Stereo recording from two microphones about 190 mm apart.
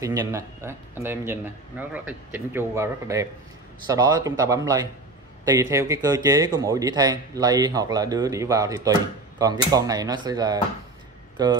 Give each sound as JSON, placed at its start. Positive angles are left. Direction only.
{"t": 0.0, "sound": "a man's voice", "side_deg": -15}